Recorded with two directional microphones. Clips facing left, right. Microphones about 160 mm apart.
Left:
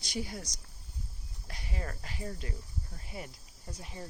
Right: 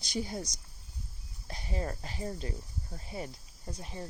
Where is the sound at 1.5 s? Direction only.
30° right (ahead or behind).